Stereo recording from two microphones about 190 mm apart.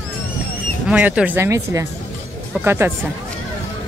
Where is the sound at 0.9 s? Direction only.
5° right (ahead or behind).